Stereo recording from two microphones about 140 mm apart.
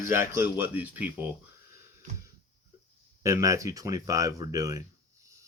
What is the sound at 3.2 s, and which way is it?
Speech, 25° right (ahead or behind).